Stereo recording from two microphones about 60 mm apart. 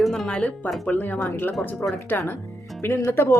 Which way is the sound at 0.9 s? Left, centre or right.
Left.